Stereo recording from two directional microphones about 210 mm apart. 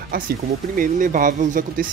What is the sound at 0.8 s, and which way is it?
Speech, 40° right (ahead or behind).